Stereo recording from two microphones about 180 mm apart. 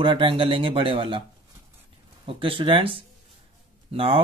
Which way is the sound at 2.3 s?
30° right (ahead or behind).